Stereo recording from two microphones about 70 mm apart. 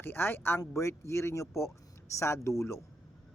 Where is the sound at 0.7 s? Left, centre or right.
Left.